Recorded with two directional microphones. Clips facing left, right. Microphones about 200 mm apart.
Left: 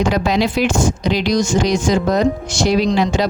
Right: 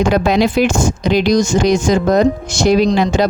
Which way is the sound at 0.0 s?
50° right (ahead or behind).